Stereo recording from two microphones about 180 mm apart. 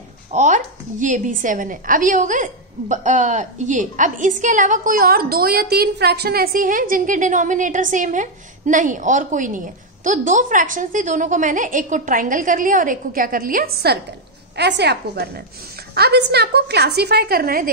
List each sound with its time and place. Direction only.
0.3 s a woman's voice: 40° right (ahead or behind)
14.6 s a woman's voice: 70° right (ahead or behind)